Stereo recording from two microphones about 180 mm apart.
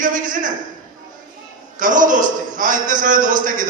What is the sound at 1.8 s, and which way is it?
A man's voice, 45° right (ahead or behind).